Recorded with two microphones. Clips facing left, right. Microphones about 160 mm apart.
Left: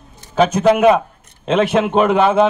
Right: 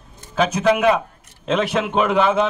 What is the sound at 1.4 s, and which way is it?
Speech, centre (ahead or behind).